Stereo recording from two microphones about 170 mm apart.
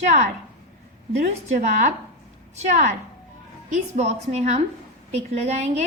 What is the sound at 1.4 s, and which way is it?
A woman's voice, 45° right (ahead or behind).